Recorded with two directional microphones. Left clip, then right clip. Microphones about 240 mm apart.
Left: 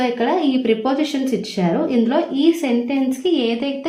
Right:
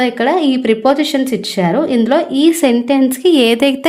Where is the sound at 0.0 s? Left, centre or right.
Right.